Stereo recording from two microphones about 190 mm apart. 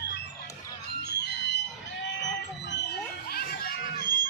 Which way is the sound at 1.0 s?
60° left (ahead or behind).